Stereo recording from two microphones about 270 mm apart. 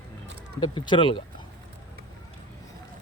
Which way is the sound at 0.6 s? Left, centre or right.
Centre.